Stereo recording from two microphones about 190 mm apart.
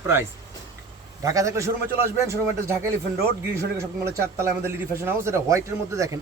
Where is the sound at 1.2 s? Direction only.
15° right (ahead or behind).